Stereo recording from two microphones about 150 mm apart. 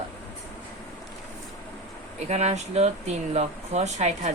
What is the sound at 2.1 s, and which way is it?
Speech, 45° right (ahead or behind).